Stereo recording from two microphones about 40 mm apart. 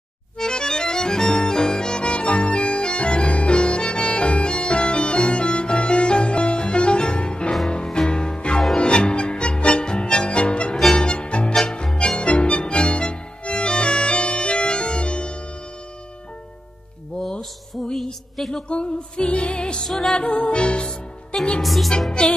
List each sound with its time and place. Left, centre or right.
0.4 s accordion: centre
7.7 s music: centre
17.2 s music: centre
18.3 s a sound: centre
18.7 s music: left
19.9 s music: centre
20.2 s music: left
21.5 s music: centre
22.2 s music: left